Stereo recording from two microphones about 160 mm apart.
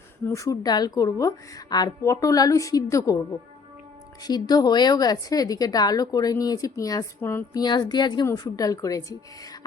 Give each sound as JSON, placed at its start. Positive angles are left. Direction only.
{"t": 0.3, "sound": "a woman's voice", "side_deg": 20}
{"t": 4.2, "sound": "a woman's voice", "side_deg": 25}